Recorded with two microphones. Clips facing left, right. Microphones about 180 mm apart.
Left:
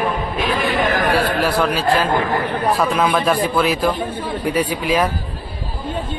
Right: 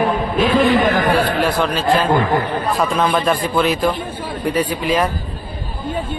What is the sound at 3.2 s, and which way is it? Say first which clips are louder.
Speech: even; 10° left (ahead or behind).